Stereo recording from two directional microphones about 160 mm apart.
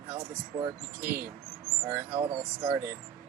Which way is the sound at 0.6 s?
15° right (ahead or behind).